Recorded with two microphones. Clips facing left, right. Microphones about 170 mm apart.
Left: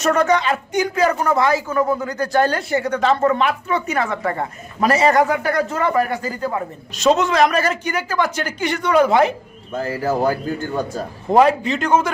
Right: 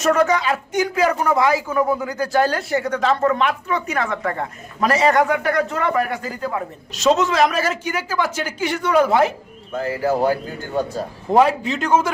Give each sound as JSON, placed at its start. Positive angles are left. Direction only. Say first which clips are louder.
{"t": 0.0, "sound": "speech", "louder": "even", "side_deg": 0}
{"t": 9.7, "sound": "speech", "louder": "right 1 dB", "side_deg": 40}
{"t": 11.3, "sound": "speech", "louder": "left 2 dB", "side_deg": 0}